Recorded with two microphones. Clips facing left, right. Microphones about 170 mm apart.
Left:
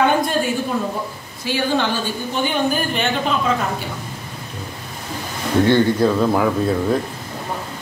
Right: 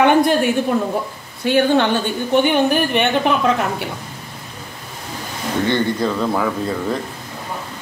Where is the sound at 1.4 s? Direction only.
60° right (ahead or behind).